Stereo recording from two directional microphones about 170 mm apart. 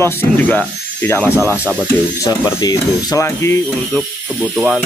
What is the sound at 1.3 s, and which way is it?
Speech, 5° right (ahead or behind).